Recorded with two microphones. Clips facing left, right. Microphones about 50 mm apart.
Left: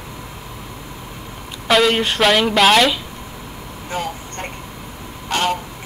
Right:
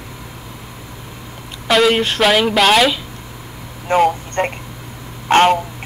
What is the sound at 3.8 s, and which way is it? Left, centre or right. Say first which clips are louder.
Speech: right 12 dB; right.